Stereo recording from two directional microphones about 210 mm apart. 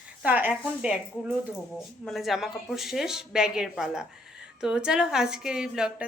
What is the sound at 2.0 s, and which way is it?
A woman's voice, centre (ahead or behind).